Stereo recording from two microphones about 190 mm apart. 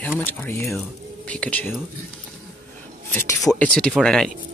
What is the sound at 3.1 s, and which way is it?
Speech, 15° left (ahead or behind).